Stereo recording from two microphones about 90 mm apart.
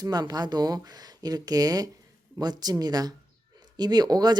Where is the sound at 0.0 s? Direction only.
50° right (ahead or behind).